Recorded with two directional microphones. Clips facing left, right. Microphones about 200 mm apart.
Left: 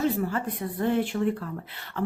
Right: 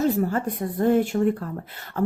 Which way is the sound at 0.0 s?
40° right (ahead or behind).